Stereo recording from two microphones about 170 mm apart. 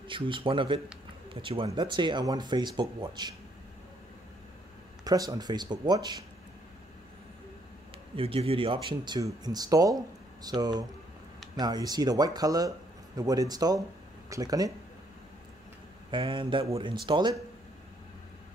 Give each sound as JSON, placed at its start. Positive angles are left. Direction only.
{"t": 0.1, "sound": "speech", "side_deg": -30}
{"t": 5.0, "sound": "speech", "side_deg": -20}
{"t": 8.2, "sound": "speech", "side_deg": -35}
{"t": 16.1, "sound": "speech", "side_deg": -30}